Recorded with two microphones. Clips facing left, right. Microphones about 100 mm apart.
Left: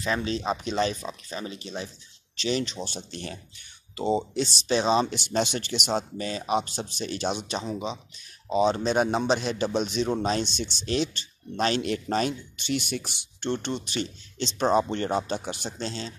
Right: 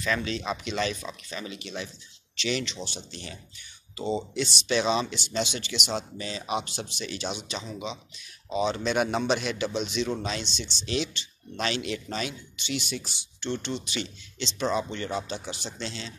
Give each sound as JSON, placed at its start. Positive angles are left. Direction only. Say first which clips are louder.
{"t": 0.0, "sound": "speech", "louder": "left 2 dB", "side_deg": 30}
{"t": 5.1, "sound": "speech", "louder": "left 4 dB", "side_deg": 50}
{"t": 9.7, "sound": "speech", "louder": "left 4 dB", "side_deg": 45}